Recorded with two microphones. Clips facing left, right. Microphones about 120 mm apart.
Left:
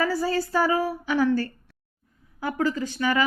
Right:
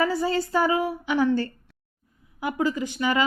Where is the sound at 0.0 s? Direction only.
20° right (ahead or behind).